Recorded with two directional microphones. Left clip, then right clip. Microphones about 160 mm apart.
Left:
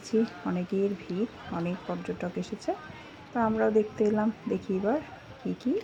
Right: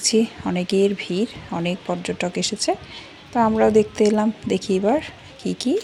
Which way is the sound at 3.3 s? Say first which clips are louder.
Right 9 dB; 45° right (ahead or behind).